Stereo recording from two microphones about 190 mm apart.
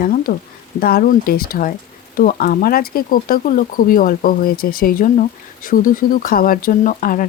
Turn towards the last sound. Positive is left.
turn(degrees=45)  # may be behind; listen again after turning